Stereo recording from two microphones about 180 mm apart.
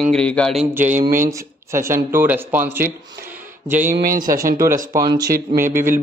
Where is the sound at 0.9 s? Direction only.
45° right (ahead or behind).